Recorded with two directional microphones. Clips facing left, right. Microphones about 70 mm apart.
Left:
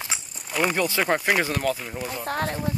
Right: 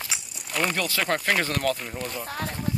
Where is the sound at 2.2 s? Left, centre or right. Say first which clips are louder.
Left 5 dB; left.